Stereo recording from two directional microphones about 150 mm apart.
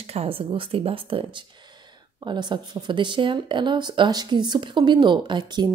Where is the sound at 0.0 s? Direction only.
40° right (ahead or behind).